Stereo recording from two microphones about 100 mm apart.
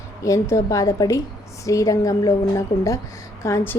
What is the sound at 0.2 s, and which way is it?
A woman's voice, 30° left (ahead or behind).